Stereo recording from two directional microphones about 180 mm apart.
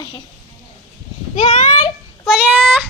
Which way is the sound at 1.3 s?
40° left (ahead or behind).